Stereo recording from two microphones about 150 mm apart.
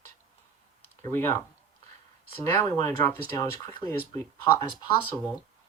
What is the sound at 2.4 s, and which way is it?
Speech, 20° left (ahead or behind).